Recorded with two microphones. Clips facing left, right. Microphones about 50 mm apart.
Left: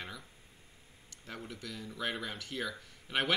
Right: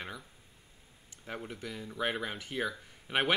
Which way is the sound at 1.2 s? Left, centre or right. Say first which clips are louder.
Right 4 dB; right.